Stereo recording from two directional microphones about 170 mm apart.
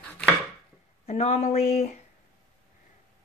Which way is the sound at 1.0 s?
40° left (ahead or behind).